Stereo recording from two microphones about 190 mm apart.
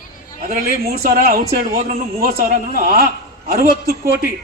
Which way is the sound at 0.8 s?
55° right (ahead or behind).